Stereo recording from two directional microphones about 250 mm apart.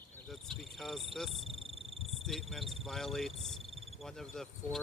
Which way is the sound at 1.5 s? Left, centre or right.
Right.